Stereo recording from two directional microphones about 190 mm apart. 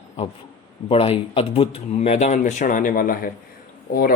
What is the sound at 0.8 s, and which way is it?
A man's voice, 30° left (ahead or behind).